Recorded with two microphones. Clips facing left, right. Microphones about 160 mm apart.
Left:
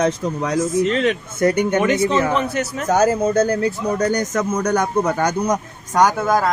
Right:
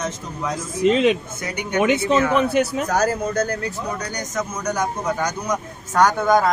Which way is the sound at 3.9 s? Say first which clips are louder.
Left 8 dB; 50° left (ahead or behind).